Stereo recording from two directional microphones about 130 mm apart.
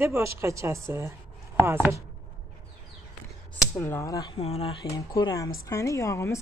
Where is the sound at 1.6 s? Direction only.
15° right (ahead or behind).